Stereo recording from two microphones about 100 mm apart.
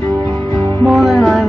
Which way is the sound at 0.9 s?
Centre (ahead or behind).